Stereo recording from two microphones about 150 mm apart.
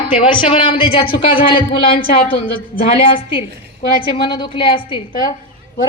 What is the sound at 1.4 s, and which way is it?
Speech, 70° left (ahead or behind).